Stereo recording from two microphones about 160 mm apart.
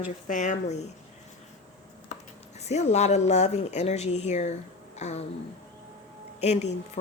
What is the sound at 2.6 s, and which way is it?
Speech, 45° left (ahead or behind).